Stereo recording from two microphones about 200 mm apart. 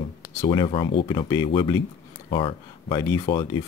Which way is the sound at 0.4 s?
25° left (ahead or behind).